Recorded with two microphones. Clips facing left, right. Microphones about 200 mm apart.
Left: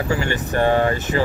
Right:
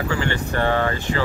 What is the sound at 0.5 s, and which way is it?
Speech, 15° left (ahead or behind).